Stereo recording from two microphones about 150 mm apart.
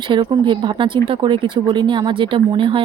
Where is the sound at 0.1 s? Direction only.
30° right (ahead or behind).